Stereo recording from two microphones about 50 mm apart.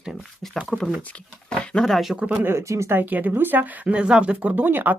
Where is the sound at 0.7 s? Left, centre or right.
Centre.